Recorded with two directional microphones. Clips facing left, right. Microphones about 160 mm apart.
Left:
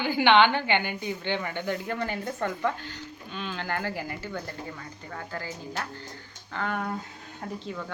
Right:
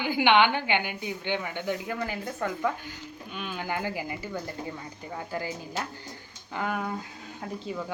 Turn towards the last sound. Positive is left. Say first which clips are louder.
# even
turn(degrees=-10)  # may be behind; listen again after turning